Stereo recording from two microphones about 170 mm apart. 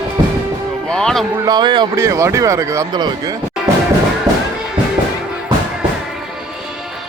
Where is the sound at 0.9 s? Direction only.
5° left (ahead or behind).